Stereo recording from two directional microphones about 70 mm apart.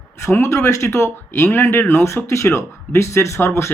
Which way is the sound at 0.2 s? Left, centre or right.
Left.